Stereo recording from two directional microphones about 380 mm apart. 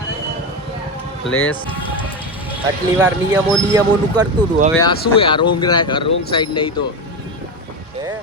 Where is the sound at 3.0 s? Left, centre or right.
Centre.